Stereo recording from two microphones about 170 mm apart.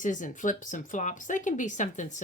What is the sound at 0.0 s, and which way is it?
Speech, 50° left (ahead or behind).